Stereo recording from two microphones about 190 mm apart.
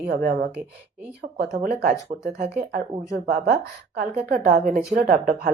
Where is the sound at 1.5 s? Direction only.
45° right (ahead or behind).